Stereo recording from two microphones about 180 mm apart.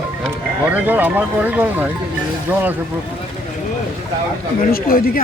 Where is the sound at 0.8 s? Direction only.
10° right (ahead or behind).